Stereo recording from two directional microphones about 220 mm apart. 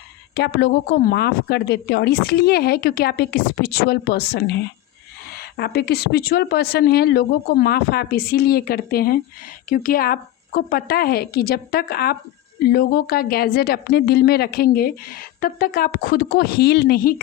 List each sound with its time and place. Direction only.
0.3 s speech: 50° left (ahead or behind)